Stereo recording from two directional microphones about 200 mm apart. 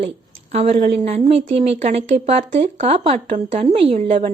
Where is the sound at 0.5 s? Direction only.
35° right (ahead or behind).